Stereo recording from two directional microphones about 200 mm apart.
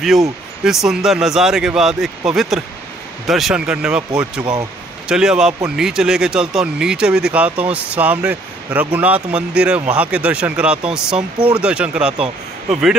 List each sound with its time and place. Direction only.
0.7 s speech: centre (ahead or behind)
4.4 s speech: 20° right (ahead or behind)
5.0 s speech: 5° right (ahead or behind)